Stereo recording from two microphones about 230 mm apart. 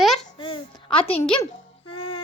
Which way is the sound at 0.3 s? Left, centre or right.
Left.